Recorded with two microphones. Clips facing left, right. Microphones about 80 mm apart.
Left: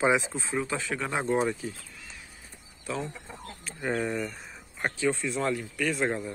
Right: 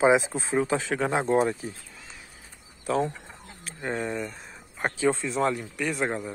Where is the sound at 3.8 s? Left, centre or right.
Centre.